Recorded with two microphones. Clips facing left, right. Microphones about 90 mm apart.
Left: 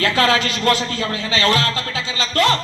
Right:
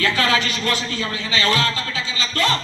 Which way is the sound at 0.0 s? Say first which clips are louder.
Left 3 dB; 55° left (ahead or behind).